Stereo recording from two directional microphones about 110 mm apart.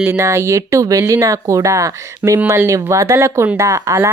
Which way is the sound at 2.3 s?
15° right (ahead or behind).